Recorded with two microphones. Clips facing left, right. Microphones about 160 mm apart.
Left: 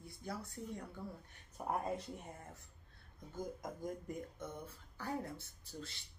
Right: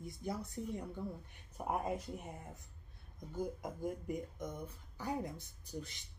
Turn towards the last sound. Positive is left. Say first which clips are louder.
# right 4 dB
turn(degrees=-15)  # may be behind; listen again after turning